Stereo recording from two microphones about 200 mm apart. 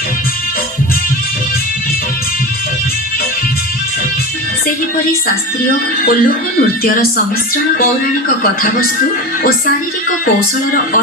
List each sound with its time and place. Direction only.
6.6 s a woman's voice: 45° left (ahead or behind)